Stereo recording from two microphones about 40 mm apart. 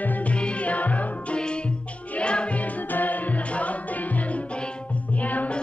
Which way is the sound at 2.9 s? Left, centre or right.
Left.